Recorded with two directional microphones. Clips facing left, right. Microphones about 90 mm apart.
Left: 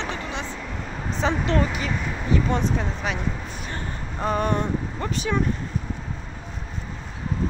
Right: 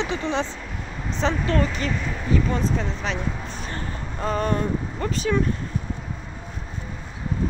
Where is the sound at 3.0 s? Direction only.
10° left (ahead or behind).